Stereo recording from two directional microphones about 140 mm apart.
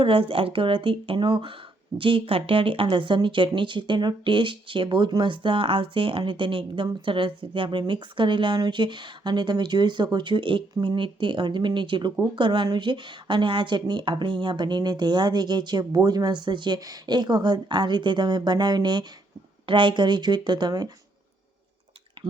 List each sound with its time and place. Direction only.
0.0 s speech: 40° right (ahead or behind)
22.2 s drip: 35° right (ahead or behind)